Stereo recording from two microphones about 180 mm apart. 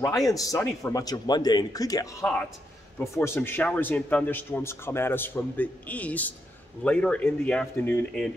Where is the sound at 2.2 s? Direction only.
10° left (ahead or behind).